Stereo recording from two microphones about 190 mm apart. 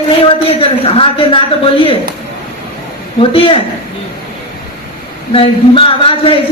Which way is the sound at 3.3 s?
30° left (ahead or behind).